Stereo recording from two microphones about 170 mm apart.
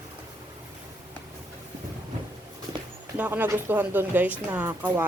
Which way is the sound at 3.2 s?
10° right (ahead or behind).